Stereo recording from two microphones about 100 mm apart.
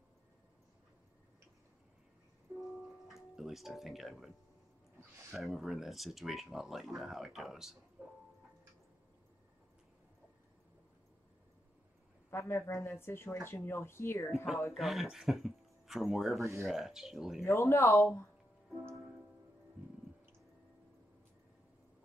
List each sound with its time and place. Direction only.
2.6 s tuning fork: centre (ahead or behind)
5.3 s speech: centre (ahead or behind)
12.3 s speech: 30° left (ahead or behind)
14.3 s speech: centre (ahead or behind)
17.4 s speech: 25° left (ahead or behind)